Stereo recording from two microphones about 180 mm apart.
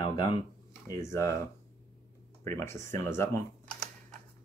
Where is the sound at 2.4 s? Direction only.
15° left (ahead or behind).